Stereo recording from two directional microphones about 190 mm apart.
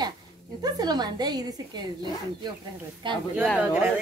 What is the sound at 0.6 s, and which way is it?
Speech, 20° right (ahead or behind).